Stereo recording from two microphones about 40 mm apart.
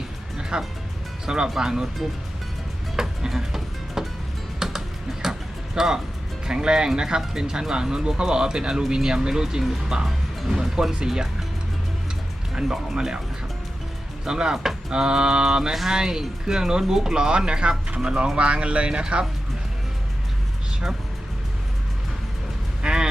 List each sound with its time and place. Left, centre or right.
0.5 s speech: right
2.9 s music: centre
4.6 s typing: centre
5.2 s a sound: centre
6.4 s speech: centre
12.5 s speech: centre
14.3 s speech: centre
15.7 s speech: centre
16.0 s speech: centre
22.8 s vehicle: centre